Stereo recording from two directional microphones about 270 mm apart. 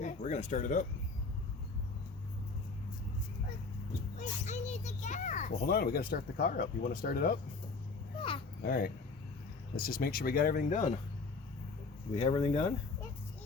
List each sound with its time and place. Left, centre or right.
0.0 s speech: left
4.2 s a child's voice: left
8.6 s a child's voice: left
12.1 s speech: left